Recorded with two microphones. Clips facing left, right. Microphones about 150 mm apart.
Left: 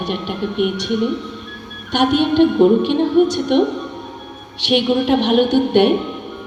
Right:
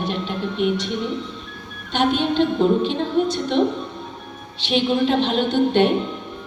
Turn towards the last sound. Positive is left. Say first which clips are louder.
# left 4 dB
turn(degrees=65)  # may be behind; listen again after turning